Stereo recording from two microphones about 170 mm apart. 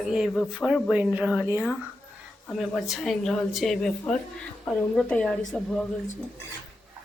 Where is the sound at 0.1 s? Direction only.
5° right (ahead or behind).